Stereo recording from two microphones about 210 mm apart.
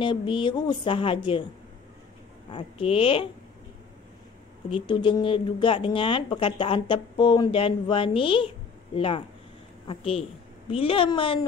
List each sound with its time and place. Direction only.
0.0 s speech: 25° left (ahead or behind)
2.5 s speech: 25° left (ahead or behind)
4.6 s speech: 25° left (ahead or behind)